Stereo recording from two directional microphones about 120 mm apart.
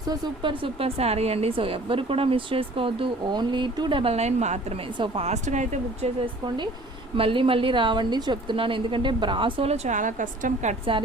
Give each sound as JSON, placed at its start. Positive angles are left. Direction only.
{"t": 0.0, "sound": "speech", "side_deg": -40}
{"t": 4.1, "sound": "a woman's voice", "side_deg": -65}
{"t": 4.9, "sound": "speech", "side_deg": -55}
{"t": 7.2, "sound": "speech", "side_deg": -50}